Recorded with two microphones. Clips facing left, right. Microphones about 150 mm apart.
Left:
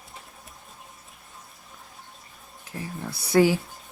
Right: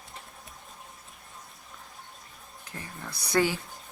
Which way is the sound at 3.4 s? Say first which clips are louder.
Left 6 dB; 20° left (ahead or behind).